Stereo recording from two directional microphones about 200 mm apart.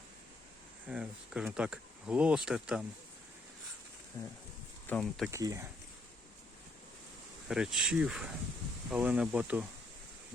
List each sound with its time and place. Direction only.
0.9 s speech: 5° right (ahead or behind)
4.1 s speech: 15° left (ahead or behind)
4.9 s speech: 5° left (ahead or behind)
5.3 s speech: 15° right (ahead or behind)
7.4 s speech: 5° right (ahead or behind)